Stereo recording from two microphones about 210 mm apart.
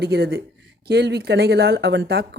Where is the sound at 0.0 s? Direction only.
50° right (ahead or behind).